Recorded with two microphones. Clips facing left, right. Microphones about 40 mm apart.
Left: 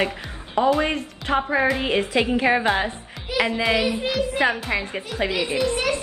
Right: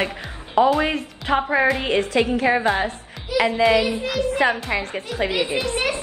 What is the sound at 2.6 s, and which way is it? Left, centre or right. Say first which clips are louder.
Speech: right 1 dB; centre.